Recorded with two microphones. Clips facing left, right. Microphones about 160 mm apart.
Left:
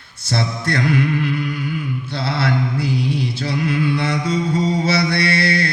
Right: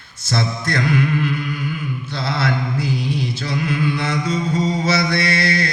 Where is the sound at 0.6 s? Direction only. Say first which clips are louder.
Left 2 dB; 65° left (ahead or behind).